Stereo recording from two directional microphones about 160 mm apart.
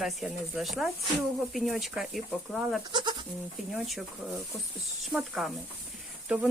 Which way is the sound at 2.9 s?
30° right (ahead or behind).